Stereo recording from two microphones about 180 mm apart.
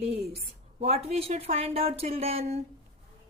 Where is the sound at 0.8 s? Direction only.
35° right (ahead or behind).